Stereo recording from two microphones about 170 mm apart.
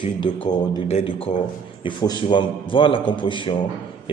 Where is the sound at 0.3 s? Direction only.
25° left (ahead or behind).